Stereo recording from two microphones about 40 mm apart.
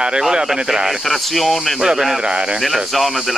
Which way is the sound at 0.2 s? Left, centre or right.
Centre.